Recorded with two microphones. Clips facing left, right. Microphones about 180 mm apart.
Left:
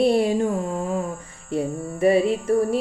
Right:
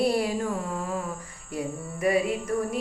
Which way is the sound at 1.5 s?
30° left (ahead or behind).